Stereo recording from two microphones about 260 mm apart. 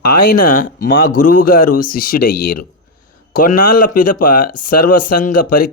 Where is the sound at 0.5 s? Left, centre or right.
Left.